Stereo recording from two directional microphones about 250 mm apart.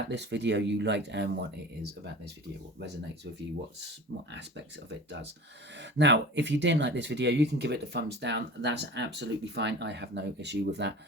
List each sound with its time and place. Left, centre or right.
0.1 s speech: right
4.3 s speech: right
6.0 s speech: right